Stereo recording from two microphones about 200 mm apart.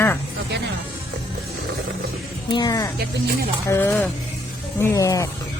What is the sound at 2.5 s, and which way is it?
Speech, 20° left (ahead or behind).